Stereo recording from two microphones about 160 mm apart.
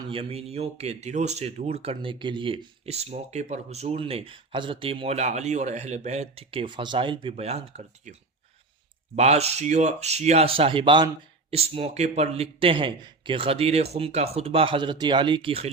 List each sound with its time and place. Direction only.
0.1 s speech: 35° right (ahead or behind)
9.1 s speech: 40° right (ahead or behind)